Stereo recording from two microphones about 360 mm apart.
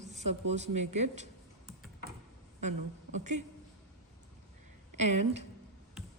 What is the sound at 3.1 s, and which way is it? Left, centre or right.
Speech, centre.